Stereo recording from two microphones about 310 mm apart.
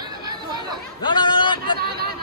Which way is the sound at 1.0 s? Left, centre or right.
Centre.